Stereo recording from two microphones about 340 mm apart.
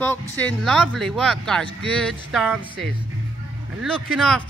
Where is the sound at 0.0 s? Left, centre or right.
Centre.